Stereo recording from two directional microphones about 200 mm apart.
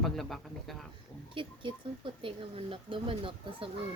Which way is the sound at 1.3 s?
25° right (ahead or behind).